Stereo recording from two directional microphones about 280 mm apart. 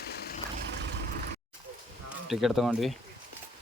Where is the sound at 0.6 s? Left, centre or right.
Right.